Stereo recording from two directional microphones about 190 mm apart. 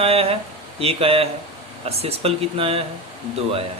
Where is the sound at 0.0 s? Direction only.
30° right (ahead or behind).